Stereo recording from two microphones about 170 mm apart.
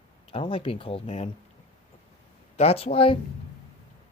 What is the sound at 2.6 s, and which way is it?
Speech, 35° left (ahead or behind).